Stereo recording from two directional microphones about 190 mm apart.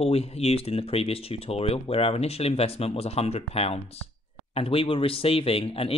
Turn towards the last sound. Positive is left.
turn(degrees=30)  # may be behind; listen again after turning